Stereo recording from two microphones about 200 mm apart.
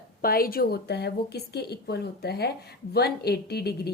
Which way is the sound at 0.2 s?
45° left (ahead or behind).